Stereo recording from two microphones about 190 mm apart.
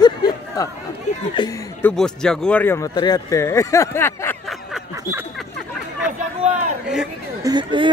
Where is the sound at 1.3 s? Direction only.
20° left (ahead or behind).